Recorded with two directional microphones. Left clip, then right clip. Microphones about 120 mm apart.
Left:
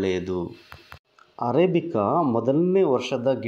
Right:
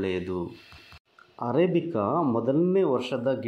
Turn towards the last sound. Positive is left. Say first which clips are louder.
# left 4 dB
turn(degrees=45)  # may be behind; listen again after turning